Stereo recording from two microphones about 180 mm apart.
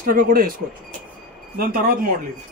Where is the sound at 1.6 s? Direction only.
55° right (ahead or behind).